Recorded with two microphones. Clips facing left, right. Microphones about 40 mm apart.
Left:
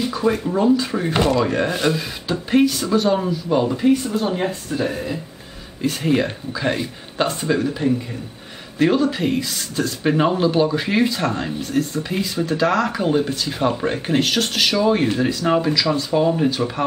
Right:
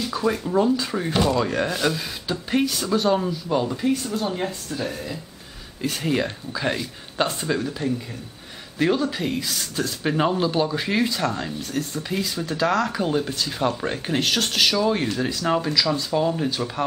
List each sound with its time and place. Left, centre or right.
0.1 s speech: centre
1.1 s speech: left
1.4 s speech: centre
5.8 s speech: centre
7.5 s speech: centre
11.8 s speech: centre